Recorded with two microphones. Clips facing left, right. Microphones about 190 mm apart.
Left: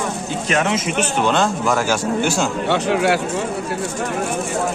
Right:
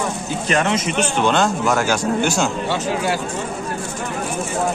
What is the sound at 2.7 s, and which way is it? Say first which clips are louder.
Speech: left 4 dB; 65° left (ahead or behind).